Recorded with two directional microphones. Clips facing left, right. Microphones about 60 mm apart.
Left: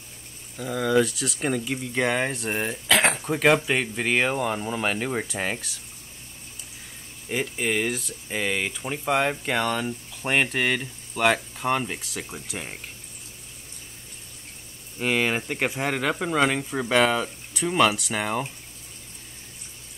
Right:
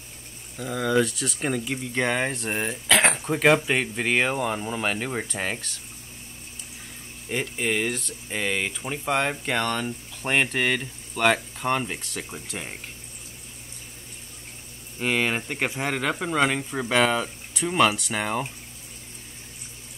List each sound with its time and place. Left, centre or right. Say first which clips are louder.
0.6 s speech: left 1 dB; centre
7.2 s speech: even; centre
15.0 s speech: left 1 dB; centre